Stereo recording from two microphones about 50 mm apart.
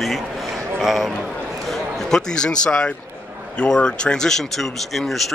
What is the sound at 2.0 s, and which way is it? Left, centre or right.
Speech, centre.